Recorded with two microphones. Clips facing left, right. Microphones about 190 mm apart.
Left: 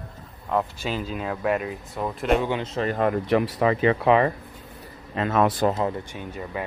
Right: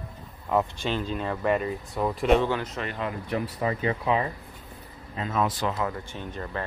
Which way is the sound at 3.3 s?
90° left.